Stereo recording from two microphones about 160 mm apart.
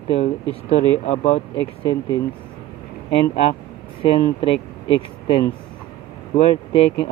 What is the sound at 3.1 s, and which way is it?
Speech, 40° left (ahead or behind).